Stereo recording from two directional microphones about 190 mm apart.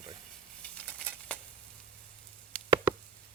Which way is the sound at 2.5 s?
5° left (ahead or behind).